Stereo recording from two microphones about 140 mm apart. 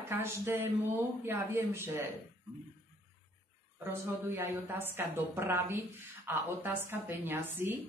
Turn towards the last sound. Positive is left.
turn(degrees=-15)  # may be behind; listen again after turning